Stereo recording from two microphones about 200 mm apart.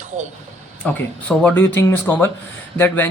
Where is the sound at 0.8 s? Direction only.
5° left (ahead or behind).